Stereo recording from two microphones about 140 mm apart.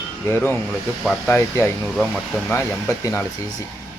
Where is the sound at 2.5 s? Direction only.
20° left (ahead or behind).